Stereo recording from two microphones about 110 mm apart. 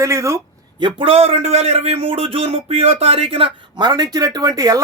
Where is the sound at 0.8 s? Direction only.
55° right (ahead or behind).